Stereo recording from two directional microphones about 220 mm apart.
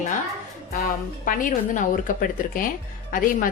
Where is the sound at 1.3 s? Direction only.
35° left (ahead or behind).